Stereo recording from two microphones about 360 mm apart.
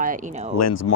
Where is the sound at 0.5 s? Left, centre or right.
Left.